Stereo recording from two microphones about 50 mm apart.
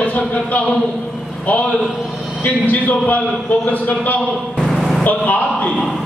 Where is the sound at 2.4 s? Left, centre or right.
Left.